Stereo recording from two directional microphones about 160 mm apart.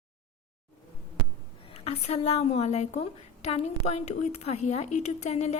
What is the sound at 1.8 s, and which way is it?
A woman's voice, 40° left (ahead or behind).